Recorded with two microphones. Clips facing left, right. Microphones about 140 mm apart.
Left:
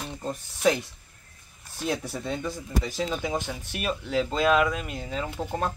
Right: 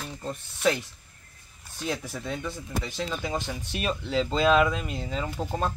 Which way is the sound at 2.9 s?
15° left (ahead or behind).